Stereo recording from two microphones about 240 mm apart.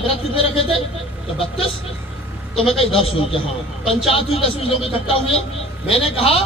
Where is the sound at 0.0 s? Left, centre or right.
Left.